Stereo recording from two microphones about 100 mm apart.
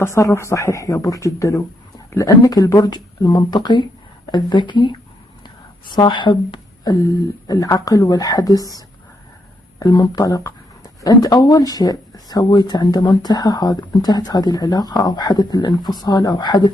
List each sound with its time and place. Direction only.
0.0 s a woman's voice: 25° left (ahead or behind); by 7.0 s 50° left (ahead or behind)
7.4 s speech: 35° left (ahead or behind)
9.9 s speech: 35° left (ahead or behind)